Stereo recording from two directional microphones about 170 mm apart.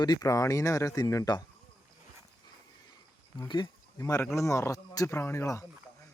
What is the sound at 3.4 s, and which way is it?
Speech, 25° left (ahead or behind).